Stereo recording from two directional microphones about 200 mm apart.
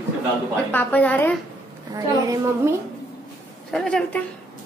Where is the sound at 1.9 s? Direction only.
15° right (ahead or behind).